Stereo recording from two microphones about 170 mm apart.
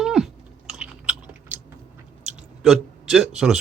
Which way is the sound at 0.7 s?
5° right (ahead or behind).